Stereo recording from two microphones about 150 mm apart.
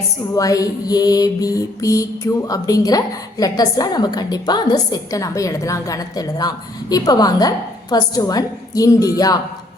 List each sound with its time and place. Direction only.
0.3 s mantra: 25° left (ahead or behind)